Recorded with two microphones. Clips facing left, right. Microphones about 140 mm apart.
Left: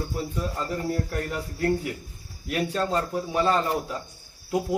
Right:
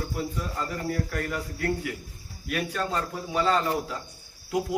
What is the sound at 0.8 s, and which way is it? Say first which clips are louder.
Speech: left 1 dB; 30° left (ahead or behind).